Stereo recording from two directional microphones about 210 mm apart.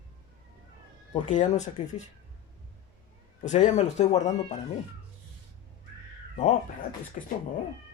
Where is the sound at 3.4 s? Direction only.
35° left (ahead or behind).